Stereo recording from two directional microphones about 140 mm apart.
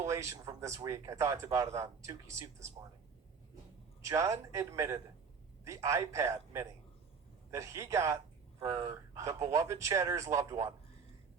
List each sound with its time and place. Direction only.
0.0 s speech: 20° right (ahead or behind)
4.0 s speech: 20° right (ahead or behind)
8.6 s speech: 30° right (ahead or behind)